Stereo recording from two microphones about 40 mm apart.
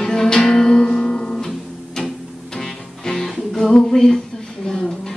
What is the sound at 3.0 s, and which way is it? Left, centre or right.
Music, centre.